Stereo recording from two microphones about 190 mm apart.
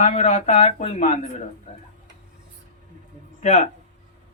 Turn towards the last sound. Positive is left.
turn(degrees=35)  # may be behind; listen again after turning